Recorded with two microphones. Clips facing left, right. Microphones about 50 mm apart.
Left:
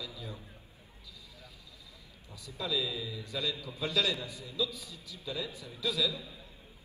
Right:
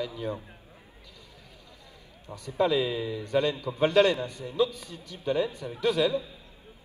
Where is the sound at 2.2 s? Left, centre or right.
Right.